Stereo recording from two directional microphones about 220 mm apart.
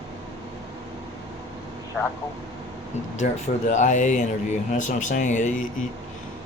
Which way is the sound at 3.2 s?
40° left (ahead or behind).